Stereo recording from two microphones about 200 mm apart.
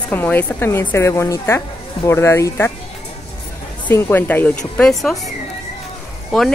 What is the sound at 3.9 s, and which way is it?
A woman's voice, 10° left (ahead or behind).